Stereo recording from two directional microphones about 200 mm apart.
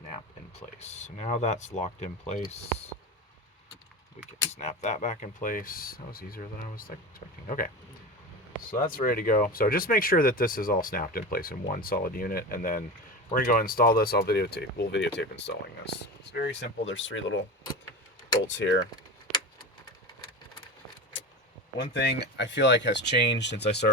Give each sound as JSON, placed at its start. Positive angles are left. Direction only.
{"t": 0.8, "sound": "speech", "side_deg": 35}
{"t": 4.5, "sound": "speech", "side_deg": 35}
{"t": 18.5, "sound": "speech", "side_deg": 70}
{"t": 21.9, "sound": "speech", "side_deg": 60}